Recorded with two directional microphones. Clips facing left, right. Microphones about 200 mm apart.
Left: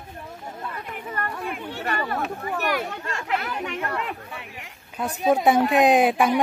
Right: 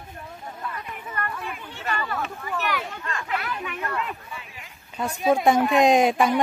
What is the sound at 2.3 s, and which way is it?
Speech, 45° left (ahead or behind).